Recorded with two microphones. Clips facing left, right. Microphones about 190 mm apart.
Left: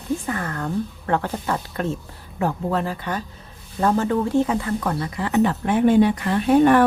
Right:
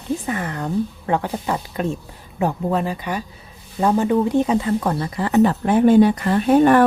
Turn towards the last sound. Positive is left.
turn(degrees=-45)  # may be behind; listen again after turning